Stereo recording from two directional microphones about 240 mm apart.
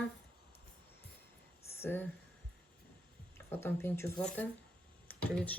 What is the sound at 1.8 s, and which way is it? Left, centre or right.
Speech, centre.